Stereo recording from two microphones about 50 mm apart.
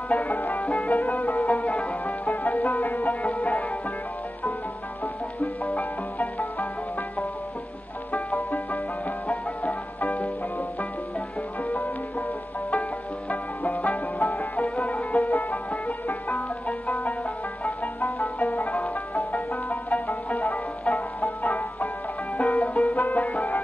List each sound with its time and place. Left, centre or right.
0.1 s music: left
5.0 s music: left
13.3 s music: left